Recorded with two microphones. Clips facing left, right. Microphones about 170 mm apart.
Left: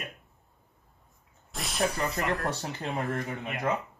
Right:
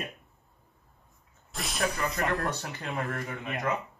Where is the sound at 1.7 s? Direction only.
30° left (ahead or behind).